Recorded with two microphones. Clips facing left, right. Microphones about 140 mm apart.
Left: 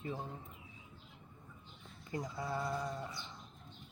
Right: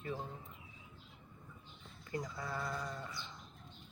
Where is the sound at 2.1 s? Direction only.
20° left (ahead or behind).